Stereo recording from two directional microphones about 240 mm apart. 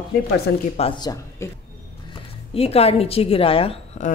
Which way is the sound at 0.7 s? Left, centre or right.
Left.